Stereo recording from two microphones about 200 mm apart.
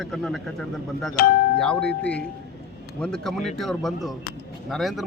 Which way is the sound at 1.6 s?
5° left (ahead or behind).